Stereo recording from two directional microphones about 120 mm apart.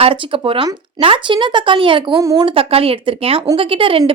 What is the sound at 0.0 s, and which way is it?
Speech, 50° right (ahead or behind).